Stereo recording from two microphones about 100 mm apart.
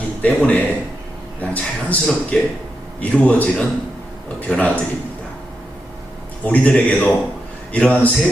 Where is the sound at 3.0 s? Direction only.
15° left (ahead or behind).